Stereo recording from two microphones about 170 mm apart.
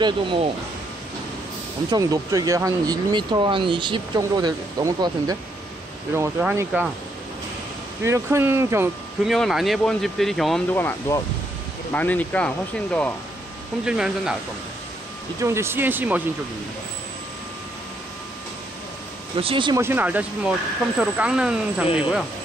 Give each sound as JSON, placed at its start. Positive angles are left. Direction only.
{"t": 0.0, "sound": "speech", "side_deg": -30}
{"t": 1.9, "sound": "speech", "side_deg": -20}
{"t": 6.5, "sound": "speech", "side_deg": -10}
{"t": 8.0, "sound": "speech", "side_deg": -15}
{"t": 9.2, "sound": "speech", "side_deg": 0}
{"t": 10.7, "sound": "speech", "side_deg": 10}
{"t": 13.8, "sound": "speech", "side_deg": -5}
{"t": 15.4, "sound": "speech", "side_deg": -15}
{"t": 19.3, "sound": "speech", "side_deg": -30}
{"t": 19.8, "sound": "speech", "side_deg": -10}